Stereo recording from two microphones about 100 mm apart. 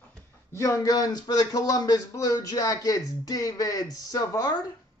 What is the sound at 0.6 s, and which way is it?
Speech, 30° left (ahead or behind).